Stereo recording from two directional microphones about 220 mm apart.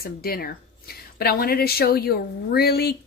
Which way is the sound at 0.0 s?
45° left (ahead or behind).